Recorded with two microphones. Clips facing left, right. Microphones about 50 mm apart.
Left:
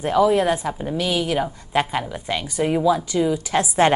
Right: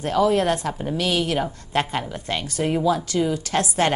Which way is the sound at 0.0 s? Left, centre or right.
Centre.